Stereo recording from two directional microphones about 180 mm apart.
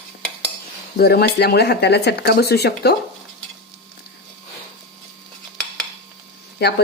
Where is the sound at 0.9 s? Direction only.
60° left (ahead or behind).